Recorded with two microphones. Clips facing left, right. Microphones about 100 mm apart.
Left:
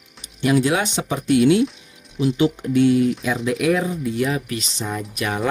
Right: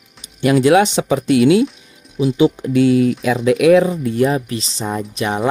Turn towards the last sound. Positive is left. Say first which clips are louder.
# right 4 dB
turn(degrees=-30)  # may be behind; listen again after turning